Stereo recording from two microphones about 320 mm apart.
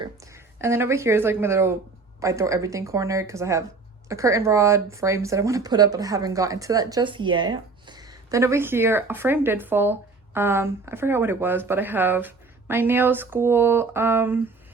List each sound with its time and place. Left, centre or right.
0.0 s a woman's voice: centre